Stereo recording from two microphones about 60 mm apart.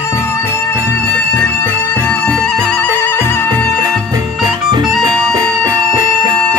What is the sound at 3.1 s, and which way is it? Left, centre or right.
Music, left.